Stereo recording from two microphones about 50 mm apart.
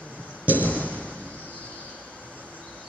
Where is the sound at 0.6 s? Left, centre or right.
Left.